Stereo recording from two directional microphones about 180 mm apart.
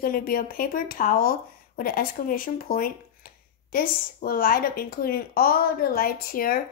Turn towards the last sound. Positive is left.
turn(degrees=55)  # may be behind; listen again after turning